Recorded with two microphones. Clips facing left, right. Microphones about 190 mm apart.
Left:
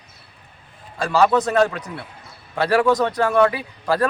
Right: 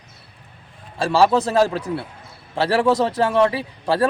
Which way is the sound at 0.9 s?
30° right (ahead or behind).